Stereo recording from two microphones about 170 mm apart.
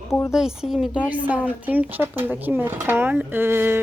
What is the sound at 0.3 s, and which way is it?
Speech, 5° right (ahead or behind).